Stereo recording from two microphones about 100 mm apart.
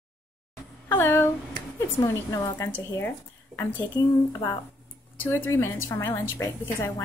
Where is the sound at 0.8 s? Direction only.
20° left (ahead or behind).